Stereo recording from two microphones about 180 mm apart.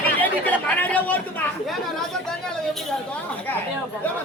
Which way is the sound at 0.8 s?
10° left (ahead or behind).